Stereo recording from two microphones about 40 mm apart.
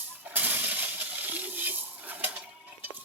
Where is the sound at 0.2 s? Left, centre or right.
Right.